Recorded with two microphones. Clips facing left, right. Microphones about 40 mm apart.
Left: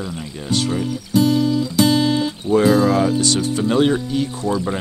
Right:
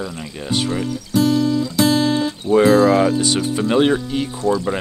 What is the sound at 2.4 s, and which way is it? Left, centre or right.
Speech, centre.